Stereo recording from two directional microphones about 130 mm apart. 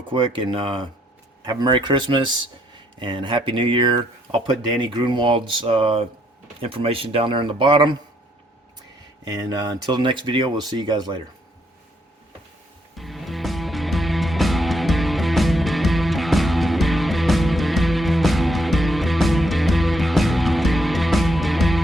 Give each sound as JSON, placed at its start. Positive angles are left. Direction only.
{"t": 0.1, "sound": "speech", "side_deg": -40}
{"t": 9.2, "sound": "speech", "side_deg": -30}
{"t": 13.0, "sound": "music", "side_deg": 0}